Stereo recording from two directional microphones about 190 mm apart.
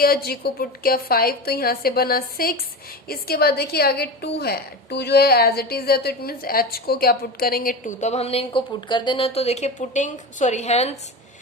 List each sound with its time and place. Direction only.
0.0 s a woman's voice: 55° left (ahead or behind); by 10.9 s 35° left (ahead or behind)